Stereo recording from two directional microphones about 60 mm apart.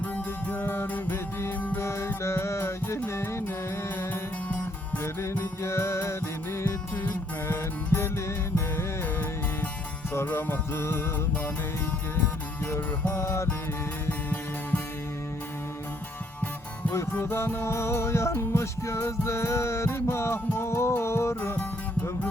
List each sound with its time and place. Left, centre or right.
0.5 s music: left
4.1 s music: left
5.6 s music: left
6.9 s music: left
10.3 s music: left
13.2 s music: left
14.1 s music: left
16.9 s music: left
17.2 s music: left